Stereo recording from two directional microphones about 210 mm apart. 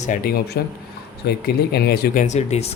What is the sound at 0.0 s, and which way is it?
A man's voice, 40° left (ahead or behind).